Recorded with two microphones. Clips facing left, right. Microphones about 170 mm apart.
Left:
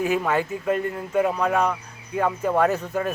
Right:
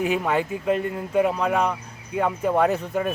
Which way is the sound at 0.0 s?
15° right (ahead or behind).